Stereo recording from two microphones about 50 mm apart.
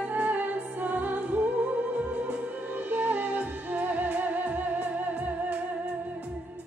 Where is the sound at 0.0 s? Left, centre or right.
Right.